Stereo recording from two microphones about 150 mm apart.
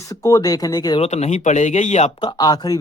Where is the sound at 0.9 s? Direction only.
45° left (ahead or behind).